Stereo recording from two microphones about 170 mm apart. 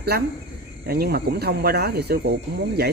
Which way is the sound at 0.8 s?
65° right (ahead or behind).